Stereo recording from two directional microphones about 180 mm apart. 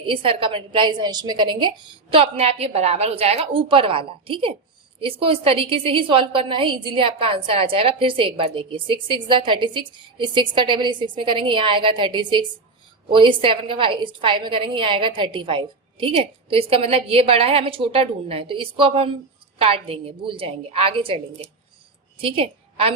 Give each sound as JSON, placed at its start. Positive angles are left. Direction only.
{"t": 0.0, "sound": "a woman's voice", "side_deg": -30}